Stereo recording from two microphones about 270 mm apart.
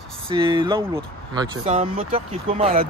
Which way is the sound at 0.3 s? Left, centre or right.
Centre.